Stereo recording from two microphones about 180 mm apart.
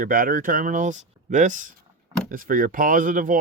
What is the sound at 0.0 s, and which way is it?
Speech, 50° right (ahead or behind).